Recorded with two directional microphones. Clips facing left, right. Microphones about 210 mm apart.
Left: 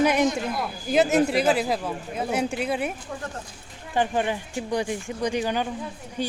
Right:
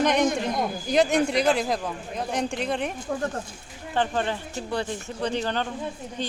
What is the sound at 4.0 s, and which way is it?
Speech, 15° left (ahead or behind).